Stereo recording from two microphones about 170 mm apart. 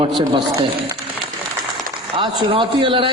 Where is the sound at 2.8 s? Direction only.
30° right (ahead or behind).